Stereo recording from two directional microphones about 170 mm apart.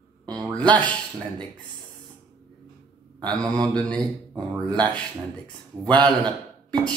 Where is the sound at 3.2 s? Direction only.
5° left (ahead or behind).